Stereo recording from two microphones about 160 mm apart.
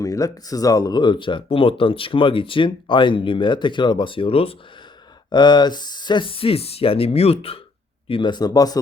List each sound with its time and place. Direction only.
0.0 s speech: 20° left (ahead or behind)